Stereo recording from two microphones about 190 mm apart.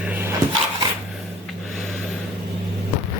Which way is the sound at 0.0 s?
10° right (ahead or behind).